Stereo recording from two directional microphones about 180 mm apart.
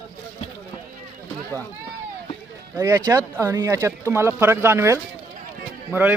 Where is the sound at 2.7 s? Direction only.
20° right (ahead or behind).